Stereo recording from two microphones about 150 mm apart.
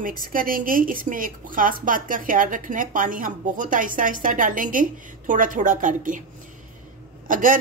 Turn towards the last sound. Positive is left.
turn(degrees=-65)  # may be behind; listen again after turning